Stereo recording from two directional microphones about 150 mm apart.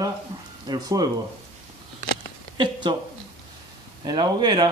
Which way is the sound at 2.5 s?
30° right (ahead or behind).